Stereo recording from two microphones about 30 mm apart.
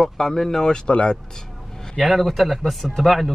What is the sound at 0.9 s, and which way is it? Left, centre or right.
Speech, left.